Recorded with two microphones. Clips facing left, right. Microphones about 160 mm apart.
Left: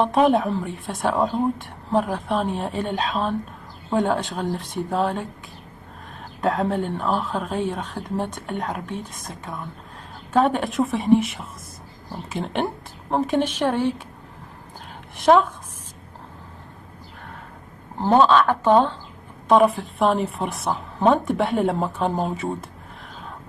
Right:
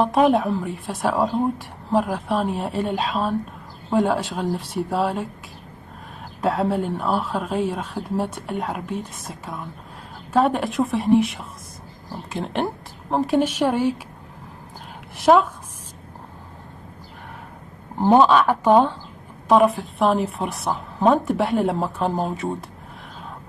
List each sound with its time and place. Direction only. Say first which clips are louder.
0.0 s a woman's voice: right 1 dB; centre (ahead or behind)
6.4 s a woman's voice: right 1 dB; centre (ahead or behind)
15.1 s a woman's voice: even; centre (ahead or behind)
18.0 s speech: right 1 dB; 15° right (ahead or behind)
19.4 s a woman's voice: even; centre (ahead or behind)